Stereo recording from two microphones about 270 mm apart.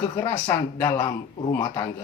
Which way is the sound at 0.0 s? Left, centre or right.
Centre.